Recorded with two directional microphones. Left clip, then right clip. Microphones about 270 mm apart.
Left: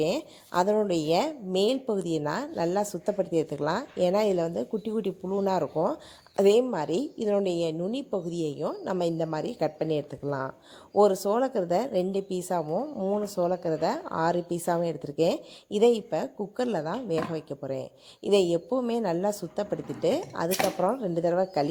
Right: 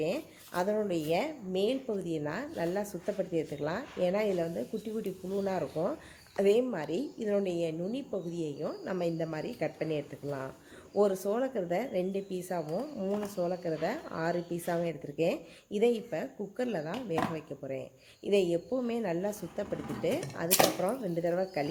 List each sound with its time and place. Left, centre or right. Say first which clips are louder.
0.0 s a woman's voice: left 6 dB; left